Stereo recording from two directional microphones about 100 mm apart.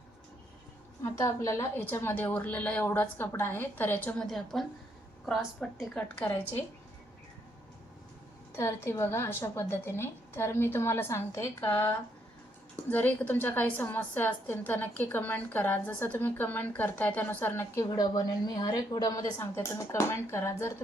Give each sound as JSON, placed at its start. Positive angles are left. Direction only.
{"t": 1.0, "sound": "a woman's voice", "side_deg": 30}
{"t": 4.2, "sound": "a woman's voice", "side_deg": 5}
{"t": 8.5, "sound": "a woman's voice", "side_deg": 25}
{"t": 17.8, "sound": "a woman's voice", "side_deg": 45}
{"t": 19.4, "sound": "a woman's voice", "side_deg": 30}